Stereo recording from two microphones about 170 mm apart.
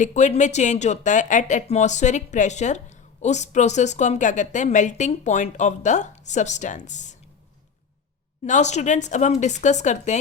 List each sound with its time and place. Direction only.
0.0 s speech: 45° left (ahead or behind)
8.4 s speech: 45° left (ahead or behind)